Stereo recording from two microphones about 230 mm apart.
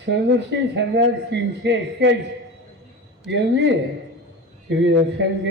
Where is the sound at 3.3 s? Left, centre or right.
Right.